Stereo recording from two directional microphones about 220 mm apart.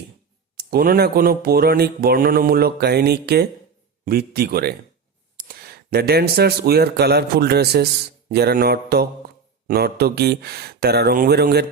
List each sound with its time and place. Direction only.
0.5 s speech: 40° right (ahead or behind)